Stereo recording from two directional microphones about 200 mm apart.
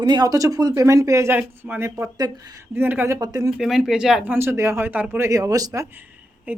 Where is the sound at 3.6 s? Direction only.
Centre (ahead or behind).